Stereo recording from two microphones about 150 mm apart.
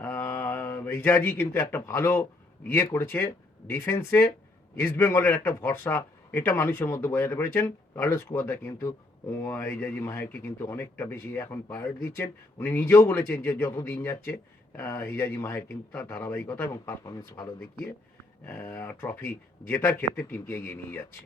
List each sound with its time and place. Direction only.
0.0 s mantra: 15° left (ahead or behind)
2.6 s a man's voice: 15° left (ahead or behind)